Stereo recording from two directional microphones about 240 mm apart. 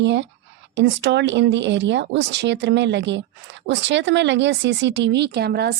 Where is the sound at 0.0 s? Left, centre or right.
Right.